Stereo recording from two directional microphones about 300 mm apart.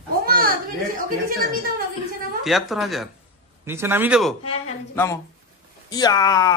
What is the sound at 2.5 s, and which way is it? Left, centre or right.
Speech, centre.